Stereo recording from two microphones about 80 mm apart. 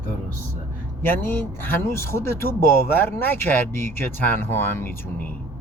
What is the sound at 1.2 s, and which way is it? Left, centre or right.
Speech, left.